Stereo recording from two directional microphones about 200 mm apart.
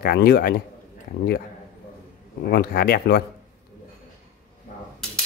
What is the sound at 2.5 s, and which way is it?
Speech, 50° left (ahead or behind).